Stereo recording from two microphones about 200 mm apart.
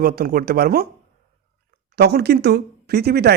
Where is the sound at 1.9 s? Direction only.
55° right (ahead or behind).